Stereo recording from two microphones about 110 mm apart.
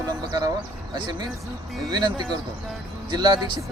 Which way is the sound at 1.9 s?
40° right (ahead or behind).